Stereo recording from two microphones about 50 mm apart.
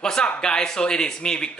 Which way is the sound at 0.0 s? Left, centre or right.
Centre.